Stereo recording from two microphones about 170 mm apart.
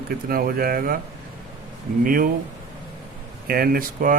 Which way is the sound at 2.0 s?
55° right (ahead or behind).